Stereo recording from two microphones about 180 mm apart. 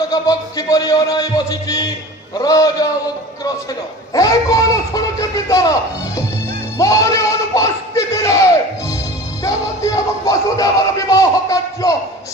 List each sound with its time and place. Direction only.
0.1 s music: 20° left (ahead or behind)
4.1 s music: 20° left (ahead or behind)
6.8 s a sound: 20° left (ahead or behind)
9.4 s music: 20° left (ahead or behind)